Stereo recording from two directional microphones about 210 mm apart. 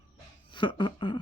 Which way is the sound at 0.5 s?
20° left (ahead or behind).